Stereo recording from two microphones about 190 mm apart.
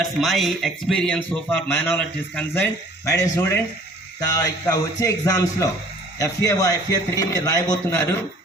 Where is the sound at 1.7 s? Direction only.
10° left (ahead or behind).